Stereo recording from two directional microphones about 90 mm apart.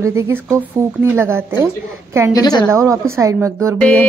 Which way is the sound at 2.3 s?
45° left (ahead or behind).